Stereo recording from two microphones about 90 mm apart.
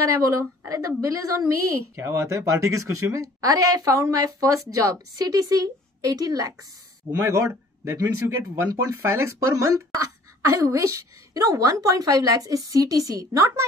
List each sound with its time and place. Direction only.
0.0 s a woman's voice: 35° right (ahead or behind)
7.2 s a man's voice: 30° right (ahead or behind)